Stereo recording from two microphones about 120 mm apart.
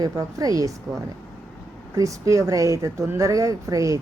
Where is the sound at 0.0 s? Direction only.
30° right (ahead or behind).